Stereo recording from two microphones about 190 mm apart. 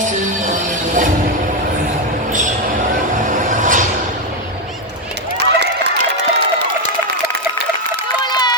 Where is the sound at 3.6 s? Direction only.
45° right (ahead or behind).